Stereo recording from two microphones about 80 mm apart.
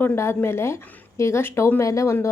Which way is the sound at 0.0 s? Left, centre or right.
Left.